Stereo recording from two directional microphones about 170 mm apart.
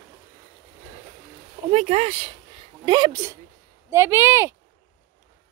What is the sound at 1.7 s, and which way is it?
A woman's voice, 40° right (ahead or behind).